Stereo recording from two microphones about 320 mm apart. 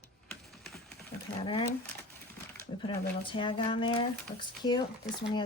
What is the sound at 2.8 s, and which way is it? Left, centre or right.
Speech, centre.